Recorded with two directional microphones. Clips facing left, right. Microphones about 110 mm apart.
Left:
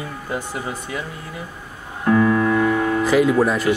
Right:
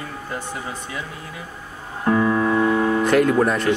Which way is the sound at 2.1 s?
20° right (ahead or behind).